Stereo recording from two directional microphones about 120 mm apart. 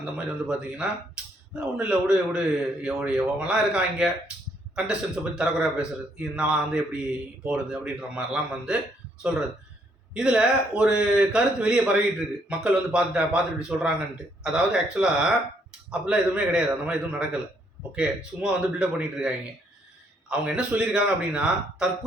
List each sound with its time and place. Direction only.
0.0 s a man's voice: 5° right (ahead or behind)
10.2 s a man's voice: 10° right (ahead or behind)